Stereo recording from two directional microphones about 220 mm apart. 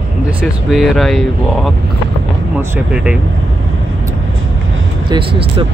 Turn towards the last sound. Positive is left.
turn(degrees=-25)  # may be behind; listen again after turning